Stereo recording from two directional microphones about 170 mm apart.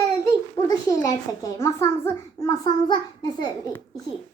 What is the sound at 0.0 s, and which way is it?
A child's voice, 20° left (ahead or behind).